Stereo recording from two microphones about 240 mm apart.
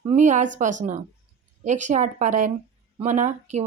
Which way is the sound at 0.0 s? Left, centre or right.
Right.